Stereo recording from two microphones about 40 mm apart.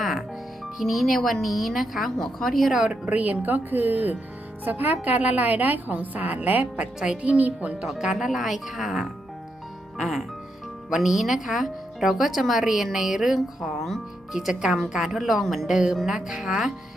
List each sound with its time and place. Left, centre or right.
0.8 s a woman's voice: centre
2.5 s a woman's voice: centre
2.9 s a woman's voice: right
6.7 s a woman's voice: right
7.3 s speech: right
7.9 s a woman's voice: centre